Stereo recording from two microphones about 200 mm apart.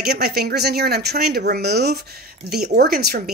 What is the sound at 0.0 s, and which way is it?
Speech, 55° right (ahead or behind).